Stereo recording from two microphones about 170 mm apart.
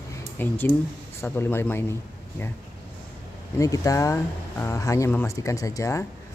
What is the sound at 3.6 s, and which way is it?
Speech, 20° left (ahead or behind).